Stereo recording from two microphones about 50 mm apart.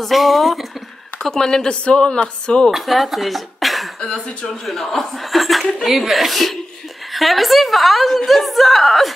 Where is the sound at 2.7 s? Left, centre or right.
Centre.